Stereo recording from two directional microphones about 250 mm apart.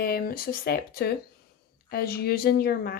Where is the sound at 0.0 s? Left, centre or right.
Left.